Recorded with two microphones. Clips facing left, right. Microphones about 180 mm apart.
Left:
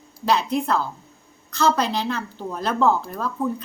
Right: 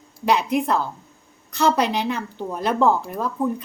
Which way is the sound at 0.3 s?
15° right (ahead or behind).